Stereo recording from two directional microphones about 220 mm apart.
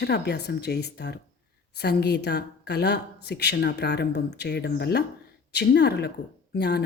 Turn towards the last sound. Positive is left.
turn(degrees=45)  # may be behind; listen again after turning